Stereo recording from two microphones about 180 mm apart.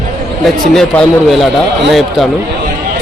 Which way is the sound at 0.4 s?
Centre (ahead or behind).